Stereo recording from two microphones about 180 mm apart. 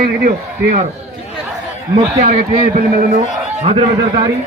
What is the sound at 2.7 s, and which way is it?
Speech, 45° right (ahead or behind).